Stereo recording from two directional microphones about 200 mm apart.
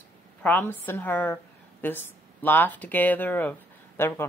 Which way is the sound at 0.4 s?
10° left (ahead or behind).